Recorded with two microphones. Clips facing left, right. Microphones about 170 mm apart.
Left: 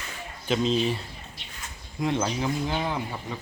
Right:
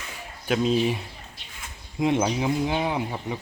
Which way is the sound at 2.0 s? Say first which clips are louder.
Right 4 dB; 20° right (ahead or behind).